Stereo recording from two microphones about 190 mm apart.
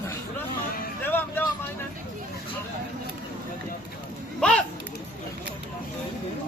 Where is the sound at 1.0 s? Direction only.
10° left (ahead or behind).